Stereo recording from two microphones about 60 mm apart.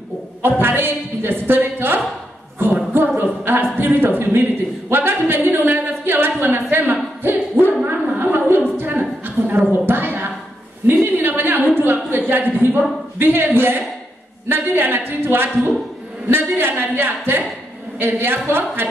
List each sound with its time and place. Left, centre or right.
0.4 s a woman's voice: right
2.6 s a sound: right
17.9 s a woman's voice: right